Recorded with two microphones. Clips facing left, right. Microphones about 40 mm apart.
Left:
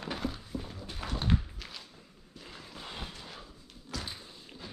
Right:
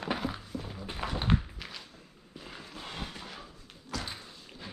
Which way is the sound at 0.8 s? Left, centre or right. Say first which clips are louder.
Right 3 dB; right.